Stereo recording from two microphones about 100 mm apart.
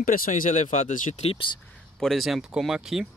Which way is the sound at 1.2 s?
70° left (ahead or behind).